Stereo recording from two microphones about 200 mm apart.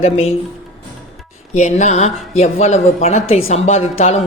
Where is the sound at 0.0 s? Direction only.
30° left (ahead or behind).